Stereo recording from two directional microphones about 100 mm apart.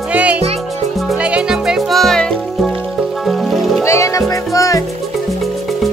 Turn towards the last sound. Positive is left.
turn(degrees=35)  # may be behind; listen again after turning